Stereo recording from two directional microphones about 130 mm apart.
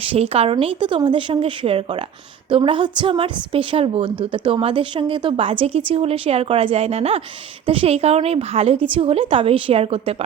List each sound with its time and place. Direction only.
0.0 s a woman's voice: 50° right (ahead or behind)